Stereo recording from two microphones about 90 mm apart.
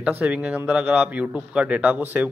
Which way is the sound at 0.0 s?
15° right (ahead or behind).